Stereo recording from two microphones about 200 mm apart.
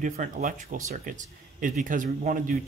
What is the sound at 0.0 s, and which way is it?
Speech, 40° right (ahead or behind).